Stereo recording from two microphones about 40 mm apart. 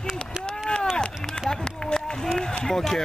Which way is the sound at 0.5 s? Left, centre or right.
Left.